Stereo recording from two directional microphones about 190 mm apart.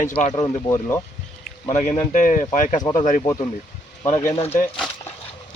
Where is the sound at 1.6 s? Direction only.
40° left (ahead or behind).